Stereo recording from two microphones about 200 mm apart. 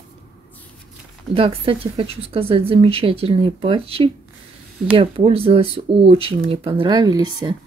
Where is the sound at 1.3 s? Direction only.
30° right (ahead or behind).